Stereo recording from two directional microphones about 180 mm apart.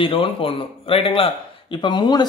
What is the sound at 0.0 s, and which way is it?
A man's voice, 30° left (ahead or behind).